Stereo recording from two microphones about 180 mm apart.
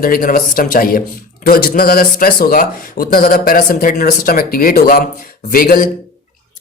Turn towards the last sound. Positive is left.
turn(degrees=55)  # may be behind; listen again after turning